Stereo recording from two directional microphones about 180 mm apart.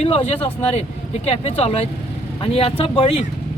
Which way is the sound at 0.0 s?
35° left (ahead or behind).